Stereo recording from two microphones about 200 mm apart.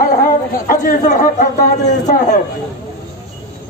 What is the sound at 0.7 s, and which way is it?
Speech, 40° left (ahead or behind).